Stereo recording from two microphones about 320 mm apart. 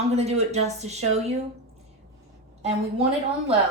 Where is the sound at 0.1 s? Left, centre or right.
Centre.